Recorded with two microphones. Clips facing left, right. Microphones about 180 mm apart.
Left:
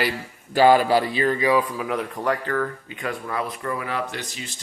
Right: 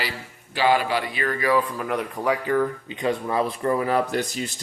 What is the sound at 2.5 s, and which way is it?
Speech, 20° right (ahead or behind).